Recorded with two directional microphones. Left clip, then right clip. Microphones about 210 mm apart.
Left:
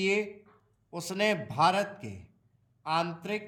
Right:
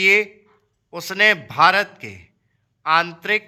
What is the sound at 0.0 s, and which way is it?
A man's voice, centre (ahead or behind).